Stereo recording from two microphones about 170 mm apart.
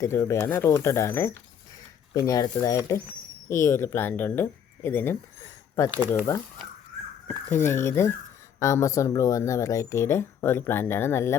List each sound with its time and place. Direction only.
0.0 s speech: 15° left (ahead or behind)
7.3 s speech: 10° left (ahead or behind)